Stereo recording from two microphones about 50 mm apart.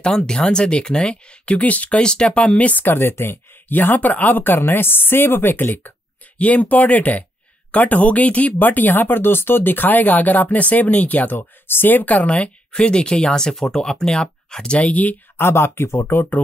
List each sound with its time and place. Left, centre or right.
0.0 s speech: centre; by 2.0 s left
2.0 s speech: centre
2.8 s speech: left
6.3 s speech: left
12.4 s speech: centre
15.3 s speech: left